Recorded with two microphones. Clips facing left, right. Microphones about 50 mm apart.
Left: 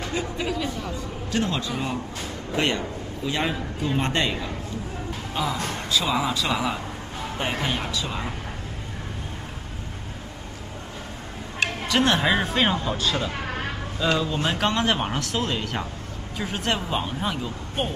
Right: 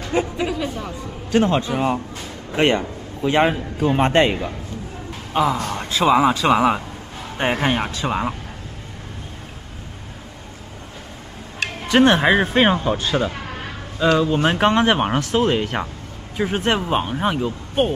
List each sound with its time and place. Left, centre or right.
0.4 s speech: centre
1.3 s a man's voice: right
11.9 s speech: right
14.4 s speech: right